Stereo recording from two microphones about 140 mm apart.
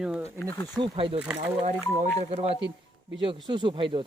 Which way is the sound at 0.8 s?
40° right (ahead or behind).